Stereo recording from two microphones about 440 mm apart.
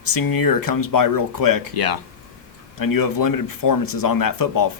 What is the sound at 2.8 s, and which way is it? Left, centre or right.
Speech, left.